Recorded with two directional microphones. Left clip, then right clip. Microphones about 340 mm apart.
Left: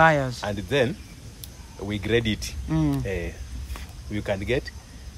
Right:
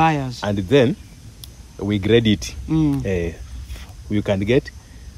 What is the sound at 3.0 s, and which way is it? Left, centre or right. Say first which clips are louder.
Speech: right 7 dB; centre.